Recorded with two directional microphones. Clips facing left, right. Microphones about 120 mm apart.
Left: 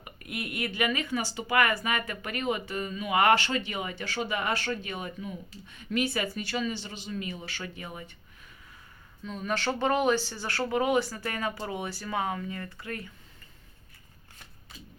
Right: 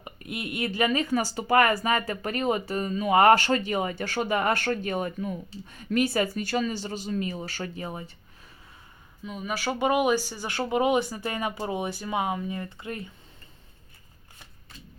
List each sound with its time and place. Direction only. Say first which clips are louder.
0.0 s speech: right 2 dB; 25° right (ahead or behind)
9.2 s speech: even; 10° right (ahead or behind)